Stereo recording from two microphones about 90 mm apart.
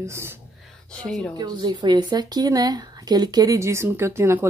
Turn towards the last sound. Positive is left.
turn(degrees=-25)  # may be behind; listen again after turning